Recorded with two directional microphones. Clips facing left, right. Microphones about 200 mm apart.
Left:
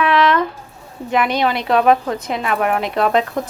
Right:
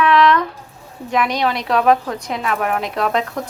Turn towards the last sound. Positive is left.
turn(degrees=0)  # may be behind; listen again after turning